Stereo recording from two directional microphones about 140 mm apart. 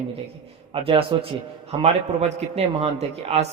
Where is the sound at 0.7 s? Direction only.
40° right (ahead or behind).